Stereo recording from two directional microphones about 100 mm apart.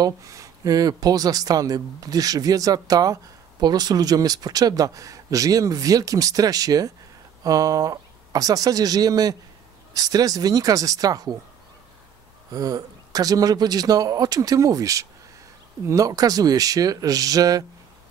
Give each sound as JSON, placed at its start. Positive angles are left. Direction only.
{"t": 0.0, "sound": "speech", "side_deg": -35}
{"t": 12.5, "sound": "speech", "side_deg": -40}